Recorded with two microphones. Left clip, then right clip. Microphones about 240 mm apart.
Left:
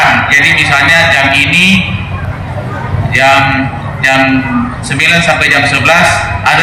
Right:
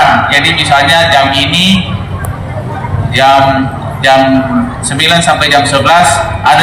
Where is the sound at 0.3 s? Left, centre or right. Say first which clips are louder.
Left 1 dB; right.